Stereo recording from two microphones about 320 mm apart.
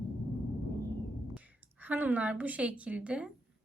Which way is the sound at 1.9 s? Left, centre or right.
Centre.